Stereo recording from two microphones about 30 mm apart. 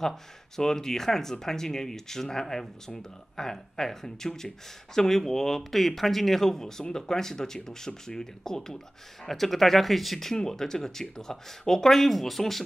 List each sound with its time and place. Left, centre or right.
0.0 s speech: centre
10.3 s speech: centre